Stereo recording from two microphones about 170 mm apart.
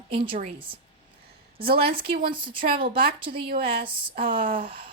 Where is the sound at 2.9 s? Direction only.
65° right (ahead or behind).